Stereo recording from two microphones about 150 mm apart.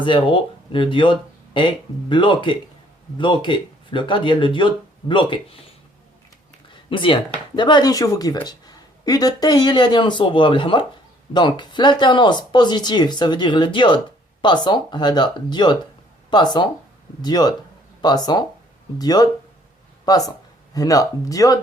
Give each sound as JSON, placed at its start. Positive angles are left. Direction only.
{"t": 0.0, "sound": "speech", "side_deg": 35}
{"t": 6.9, "sound": "speech", "side_deg": 35}